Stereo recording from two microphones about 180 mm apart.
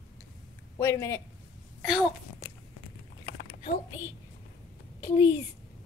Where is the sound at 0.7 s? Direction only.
15° left (ahead or behind).